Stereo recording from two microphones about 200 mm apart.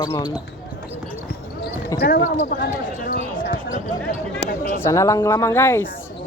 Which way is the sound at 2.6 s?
45° left (ahead or behind).